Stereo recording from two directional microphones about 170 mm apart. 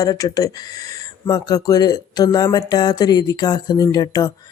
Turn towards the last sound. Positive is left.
turn(degrees=20)  # may be behind; listen again after turning